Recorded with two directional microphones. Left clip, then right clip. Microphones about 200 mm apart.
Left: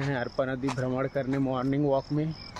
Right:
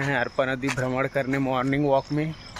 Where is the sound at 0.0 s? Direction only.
5° right (ahead or behind).